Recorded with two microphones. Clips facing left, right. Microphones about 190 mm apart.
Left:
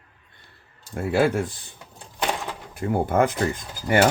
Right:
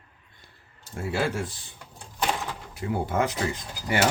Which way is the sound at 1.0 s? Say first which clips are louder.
Left 7 dB; 55° left (ahead or behind).